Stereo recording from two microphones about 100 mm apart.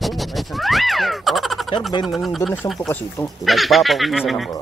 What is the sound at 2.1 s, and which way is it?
Speech, centre (ahead or behind).